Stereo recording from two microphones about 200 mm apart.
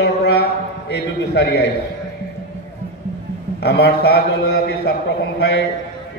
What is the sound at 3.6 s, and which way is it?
A man's voice, 55° left (ahead or behind).